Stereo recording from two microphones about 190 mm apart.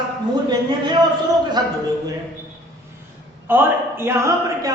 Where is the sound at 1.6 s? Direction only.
20° right (ahead or behind).